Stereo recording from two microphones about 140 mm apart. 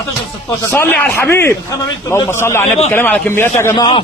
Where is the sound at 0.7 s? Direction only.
10° left (ahead or behind).